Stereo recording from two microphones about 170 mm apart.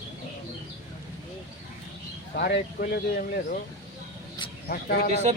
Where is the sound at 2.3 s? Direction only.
75° left (ahead or behind); by 3.3 s 60° left (ahead or behind).